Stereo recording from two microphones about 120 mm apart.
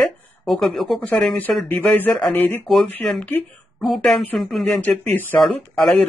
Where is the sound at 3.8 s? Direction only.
Centre (ahead or behind).